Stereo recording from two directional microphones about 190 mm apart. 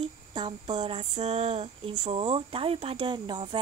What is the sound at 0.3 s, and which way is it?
Speech, 25° right (ahead or behind).